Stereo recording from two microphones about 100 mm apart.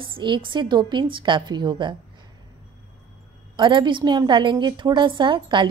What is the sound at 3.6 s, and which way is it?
A woman's voice, 50° right (ahead or behind).